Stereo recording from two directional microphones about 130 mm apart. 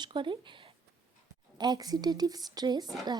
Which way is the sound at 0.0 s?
40° right (ahead or behind).